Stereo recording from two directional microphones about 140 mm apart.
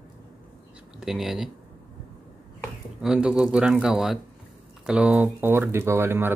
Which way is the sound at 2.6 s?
5° right (ahead or behind).